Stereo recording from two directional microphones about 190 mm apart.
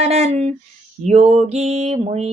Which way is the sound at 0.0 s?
35° right (ahead or behind).